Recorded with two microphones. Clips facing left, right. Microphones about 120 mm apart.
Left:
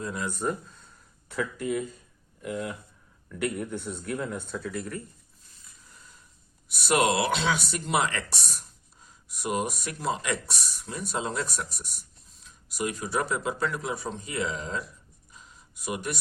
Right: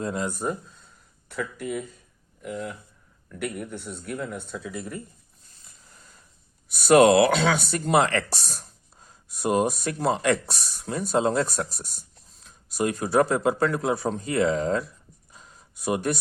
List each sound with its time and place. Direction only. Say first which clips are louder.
0.0 s speech: right 5 dB; 35° right (ahead or behind)
0.3 s speech: right 1 dB; 15° right (ahead or behind)
1.3 s a man's voice: left 1 dB; centre (ahead or behind)
4.7 s speech: even; 15° right (ahead or behind)
6.7 s speech: right 9 dB; 45° right (ahead or behind)
15.4 s a sound: right 1 dB; 40° right (ahead or behind)